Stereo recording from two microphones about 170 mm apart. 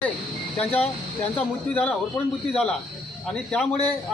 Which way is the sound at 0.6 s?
5° left (ahead or behind).